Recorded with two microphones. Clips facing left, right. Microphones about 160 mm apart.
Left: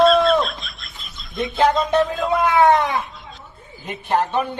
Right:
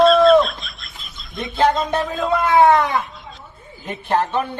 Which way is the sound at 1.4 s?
Centre (ahead or behind).